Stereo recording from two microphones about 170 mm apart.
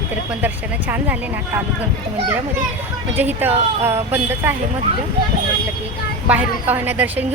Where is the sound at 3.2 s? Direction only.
10° right (ahead or behind).